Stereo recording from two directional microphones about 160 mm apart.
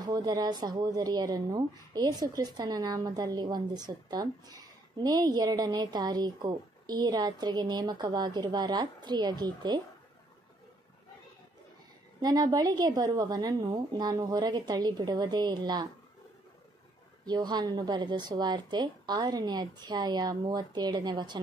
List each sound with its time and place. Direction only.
0.0 s a woman's voice: 25° right (ahead or behind)
12.2 s a woman's voice: 25° right (ahead or behind)
17.2 s a woman's voice: 25° right (ahead or behind)